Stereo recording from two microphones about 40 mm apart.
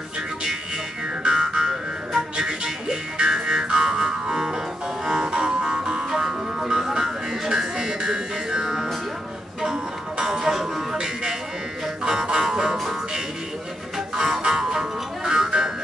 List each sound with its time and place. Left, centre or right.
1.2 s music: centre
13.9 s music: centre